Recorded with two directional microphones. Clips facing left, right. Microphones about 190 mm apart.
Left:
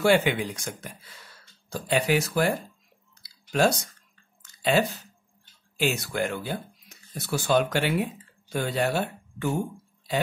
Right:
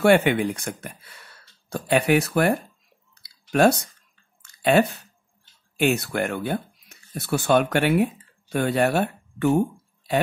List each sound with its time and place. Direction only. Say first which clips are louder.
0.0 s speech: right 4 dB; 60° right (ahead or behind)
3.2 s chewing: right 4 dB; 60° right (ahead or behind)
5.8 s speech: right 4 dB; 60° right (ahead or behind)